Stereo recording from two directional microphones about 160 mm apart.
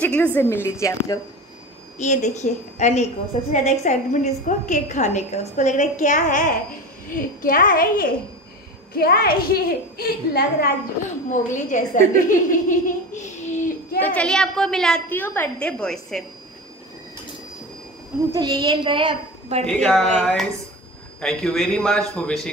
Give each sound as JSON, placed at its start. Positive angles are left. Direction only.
{"t": 0.0, "sound": "a woman's voice", "side_deg": 10}
{"t": 2.0, "sound": "a woman's voice", "side_deg": 50}
{"t": 11.2, "sound": "a woman's voice", "side_deg": 50}
{"t": 13.9, "sound": "a woman's voice", "side_deg": 10}
{"t": 18.3, "sound": "a child's voice", "side_deg": -25}
{"t": 19.6, "sound": "a woman's voice", "side_deg": 0}